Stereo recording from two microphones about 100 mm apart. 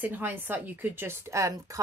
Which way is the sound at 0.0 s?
20° right (ahead or behind).